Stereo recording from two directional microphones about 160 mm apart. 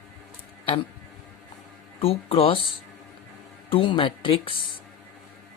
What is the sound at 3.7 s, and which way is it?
Speech, 30° left (ahead or behind).